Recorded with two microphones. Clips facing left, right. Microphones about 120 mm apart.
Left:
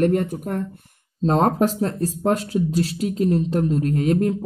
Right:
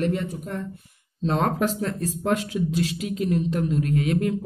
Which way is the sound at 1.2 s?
40° left (ahead or behind).